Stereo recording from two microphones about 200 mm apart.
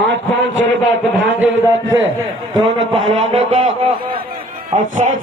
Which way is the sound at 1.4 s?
10° right (ahead or behind).